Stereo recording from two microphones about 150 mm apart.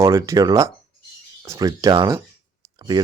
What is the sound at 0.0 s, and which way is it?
Speech, 20° right (ahead or behind).